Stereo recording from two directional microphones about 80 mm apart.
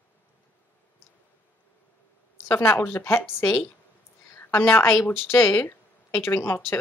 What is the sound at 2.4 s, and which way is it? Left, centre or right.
A woman's voice, left.